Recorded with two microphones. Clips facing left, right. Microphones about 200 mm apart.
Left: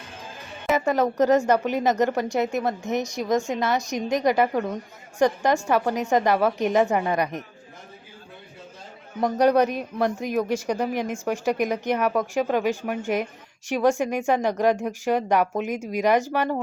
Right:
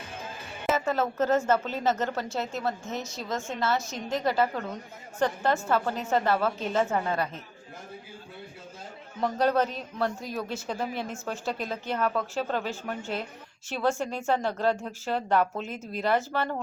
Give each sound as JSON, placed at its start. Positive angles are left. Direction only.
{"t": 0.9, "sound": "speech", "side_deg": 15}
{"t": 9.2, "sound": "speech", "side_deg": 15}